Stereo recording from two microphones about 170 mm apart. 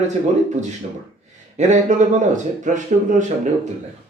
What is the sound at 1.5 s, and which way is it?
Speech, 45° right (ahead or behind).